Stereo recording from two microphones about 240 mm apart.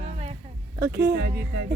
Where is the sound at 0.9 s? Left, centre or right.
Right.